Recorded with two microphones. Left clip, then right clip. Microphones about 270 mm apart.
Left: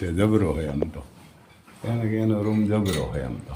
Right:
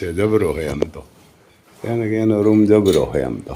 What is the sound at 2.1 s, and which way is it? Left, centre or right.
Speech, centre.